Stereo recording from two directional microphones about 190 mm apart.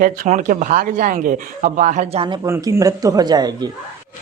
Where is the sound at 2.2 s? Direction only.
25° right (ahead or behind).